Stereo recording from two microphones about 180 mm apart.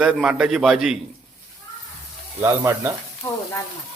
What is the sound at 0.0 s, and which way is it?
Speech, 5° right (ahead or behind).